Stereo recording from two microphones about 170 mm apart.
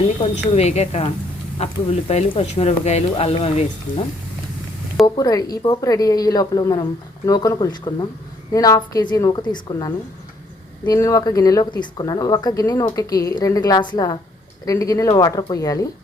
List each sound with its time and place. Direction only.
0.2 s speech: 40° left (ahead or behind)
5.1 s speech: 20° left (ahead or behind)